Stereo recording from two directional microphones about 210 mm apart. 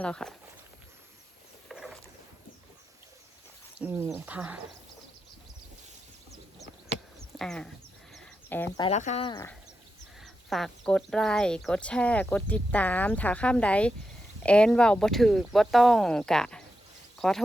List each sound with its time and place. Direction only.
0.0 s speech: 5° left (ahead or behind)
1.6 s vehicle: centre (ahead or behind)
3.8 s speech: 10° right (ahead or behind)
7.3 s a sound: centre (ahead or behind)
8.8 s speech: 35° left (ahead or behind)
9.2 s speech: 20° left (ahead or behind)
10.2 s speech: centre (ahead or behind)